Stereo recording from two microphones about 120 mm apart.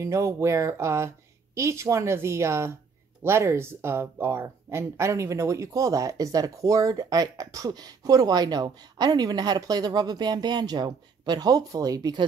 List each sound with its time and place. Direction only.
0.0 s speech: 25° right (ahead or behind)